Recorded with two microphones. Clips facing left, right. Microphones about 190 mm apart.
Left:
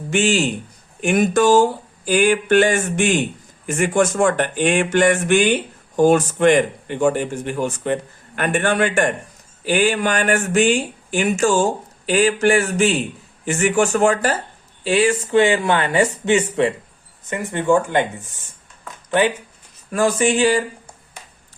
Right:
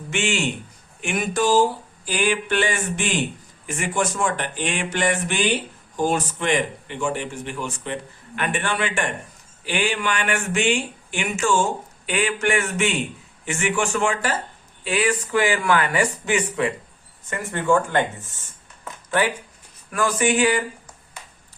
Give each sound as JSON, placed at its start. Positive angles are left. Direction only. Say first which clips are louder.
{"t": 0.1, "sound": "speech", "louder": "left 6 dB", "side_deg": 35}
{"t": 14.8, "sound": "speech", "louder": "left 5 dB", "side_deg": 30}
{"t": 19.9, "sound": "speech", "louder": "left 4 dB", "side_deg": 30}